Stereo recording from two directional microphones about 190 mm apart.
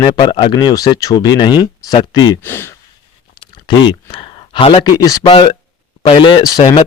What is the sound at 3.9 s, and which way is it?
Speech, 25° left (ahead or behind).